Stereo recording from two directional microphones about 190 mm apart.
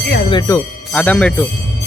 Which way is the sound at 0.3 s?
20° left (ahead or behind).